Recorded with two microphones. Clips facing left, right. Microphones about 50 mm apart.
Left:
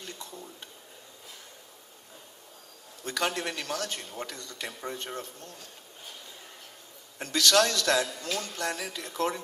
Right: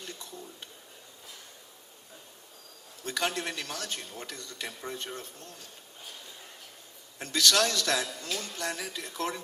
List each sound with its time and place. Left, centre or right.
3.0 s a man's voice: left
7.3 s a man's voice: left